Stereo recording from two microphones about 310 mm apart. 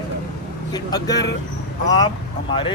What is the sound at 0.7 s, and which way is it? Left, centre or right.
Speech, centre.